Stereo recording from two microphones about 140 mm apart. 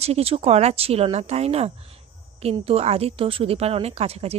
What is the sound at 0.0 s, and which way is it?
A woman's voice, 45° right (ahead or behind).